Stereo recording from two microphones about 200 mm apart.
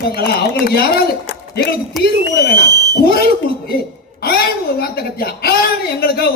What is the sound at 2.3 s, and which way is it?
Speech, 55° left (ahead or behind).